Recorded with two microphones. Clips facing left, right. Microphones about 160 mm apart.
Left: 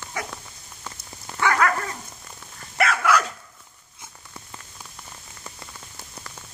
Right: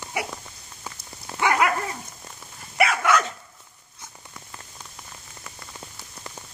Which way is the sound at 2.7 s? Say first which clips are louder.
Even; centre (ahead or behind).